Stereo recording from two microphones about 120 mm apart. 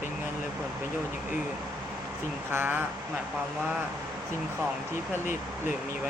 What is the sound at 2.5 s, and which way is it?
Speech, 15° right (ahead or behind).